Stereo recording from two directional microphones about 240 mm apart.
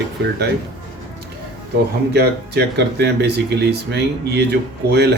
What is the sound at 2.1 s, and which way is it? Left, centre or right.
Speech, right.